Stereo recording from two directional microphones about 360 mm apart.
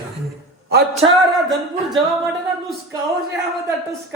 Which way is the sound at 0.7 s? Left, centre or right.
Right.